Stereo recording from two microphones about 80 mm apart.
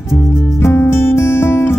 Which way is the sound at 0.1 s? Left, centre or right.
Left.